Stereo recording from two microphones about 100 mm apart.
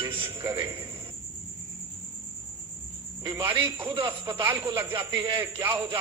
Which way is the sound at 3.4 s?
55° right (ahead or behind).